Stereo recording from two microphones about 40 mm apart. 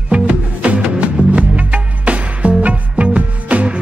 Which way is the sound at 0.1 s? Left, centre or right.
Right.